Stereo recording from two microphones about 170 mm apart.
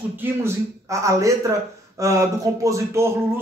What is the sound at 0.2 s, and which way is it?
A man's voice, 15° right (ahead or behind).